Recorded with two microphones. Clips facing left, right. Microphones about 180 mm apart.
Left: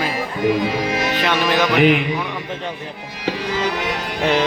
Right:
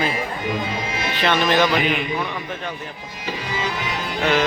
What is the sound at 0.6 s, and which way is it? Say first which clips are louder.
Speech: left 6 dB; 75° left (ahead or behind).